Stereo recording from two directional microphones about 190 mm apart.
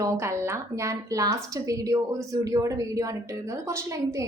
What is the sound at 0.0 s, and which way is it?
A woman's voice, 15° right (ahead or behind).